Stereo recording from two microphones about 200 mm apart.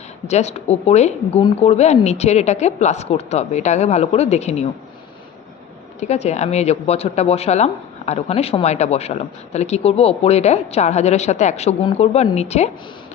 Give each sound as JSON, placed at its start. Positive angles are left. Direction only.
{"t": 0.3, "sound": "speech", "side_deg": 35}
{"t": 6.0, "sound": "speech", "side_deg": 35}